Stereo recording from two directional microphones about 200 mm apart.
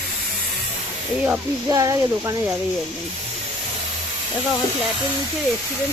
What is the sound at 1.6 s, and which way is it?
Speech, 20° right (ahead or behind).